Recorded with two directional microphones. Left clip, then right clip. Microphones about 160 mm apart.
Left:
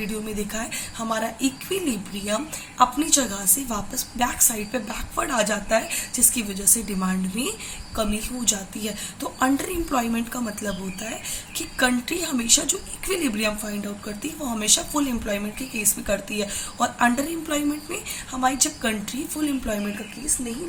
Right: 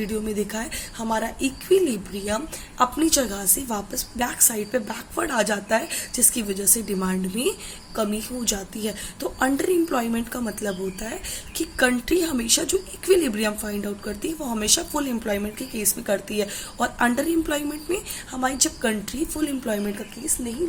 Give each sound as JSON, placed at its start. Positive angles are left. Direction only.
{"t": 0.0, "sound": "a woman's voice", "side_deg": -45}